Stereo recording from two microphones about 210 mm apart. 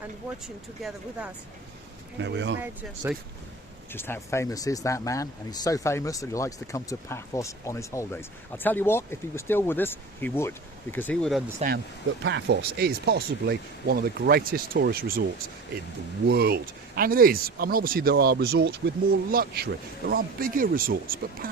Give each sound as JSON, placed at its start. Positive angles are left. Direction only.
{"t": 0.4, "sound": "speech", "side_deg": 0}
{"t": 2.1, "sound": "speech", "side_deg": -60}
{"t": 2.6, "sound": "speech", "side_deg": -10}
{"t": 3.9, "sound": "speech", "side_deg": 10}
{"t": 12.2, "sound": "speech", "side_deg": -55}
{"t": 16.2, "sound": "speech", "side_deg": -50}